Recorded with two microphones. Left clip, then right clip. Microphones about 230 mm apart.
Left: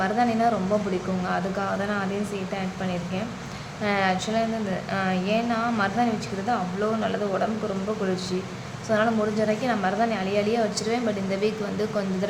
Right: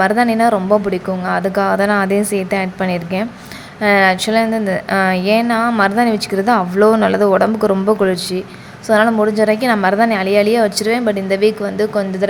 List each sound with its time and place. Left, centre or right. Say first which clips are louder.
0.0 s a woman's voice: right 10 dB; right